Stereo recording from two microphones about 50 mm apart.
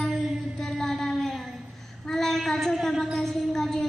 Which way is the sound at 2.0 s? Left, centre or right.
Centre.